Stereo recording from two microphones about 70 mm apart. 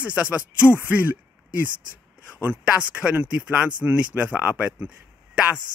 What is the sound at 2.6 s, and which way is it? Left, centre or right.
Speech, centre.